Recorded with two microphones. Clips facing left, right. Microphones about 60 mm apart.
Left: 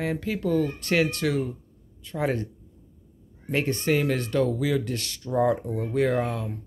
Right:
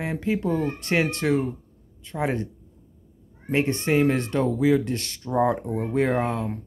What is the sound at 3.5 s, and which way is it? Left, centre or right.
Speech, right.